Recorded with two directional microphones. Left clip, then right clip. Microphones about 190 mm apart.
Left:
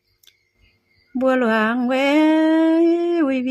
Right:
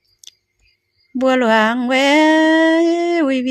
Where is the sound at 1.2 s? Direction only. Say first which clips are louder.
Right 4 dB; 15° right (ahead or behind).